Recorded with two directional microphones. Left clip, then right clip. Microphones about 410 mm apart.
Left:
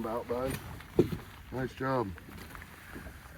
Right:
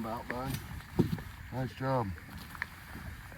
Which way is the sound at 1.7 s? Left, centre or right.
Centre.